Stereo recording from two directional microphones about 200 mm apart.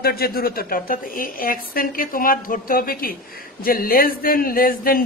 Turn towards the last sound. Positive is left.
turn(degrees=45)  # may be behind; listen again after turning